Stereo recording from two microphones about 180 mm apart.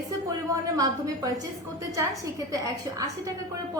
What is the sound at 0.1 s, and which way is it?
A woman's voice, 20° right (ahead or behind).